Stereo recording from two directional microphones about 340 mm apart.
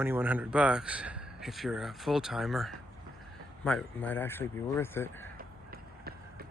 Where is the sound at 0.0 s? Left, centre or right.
Centre.